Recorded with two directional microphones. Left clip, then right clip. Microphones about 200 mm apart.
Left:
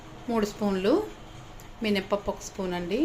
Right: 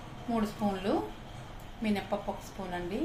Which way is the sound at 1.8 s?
50° left (ahead or behind).